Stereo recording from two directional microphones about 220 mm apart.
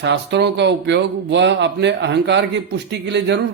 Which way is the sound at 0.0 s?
55° right (ahead or behind).